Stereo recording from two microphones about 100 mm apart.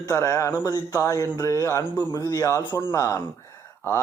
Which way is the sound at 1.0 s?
30° left (ahead or behind).